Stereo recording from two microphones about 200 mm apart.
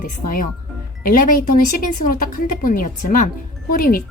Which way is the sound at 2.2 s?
45° left (ahead or behind).